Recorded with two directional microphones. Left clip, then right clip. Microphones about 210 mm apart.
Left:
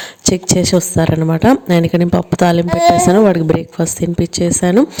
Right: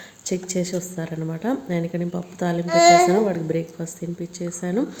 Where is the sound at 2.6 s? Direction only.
10° left (ahead or behind).